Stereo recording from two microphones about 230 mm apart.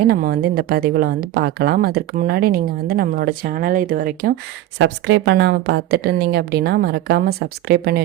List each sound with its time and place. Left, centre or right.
0.1 s speech: right
4.8 s a woman's voice: right